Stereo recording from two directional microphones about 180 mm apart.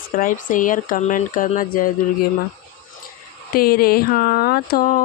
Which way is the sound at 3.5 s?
55° left (ahead or behind).